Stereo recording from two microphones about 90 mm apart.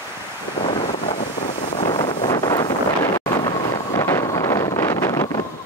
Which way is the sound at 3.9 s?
30° left (ahead or behind).